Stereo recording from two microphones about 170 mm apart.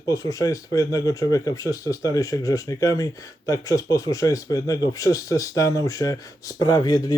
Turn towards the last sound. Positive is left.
turn(degrees=25)  # may be behind; listen again after turning